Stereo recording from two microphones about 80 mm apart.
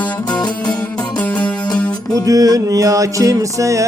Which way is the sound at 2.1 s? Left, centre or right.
Right.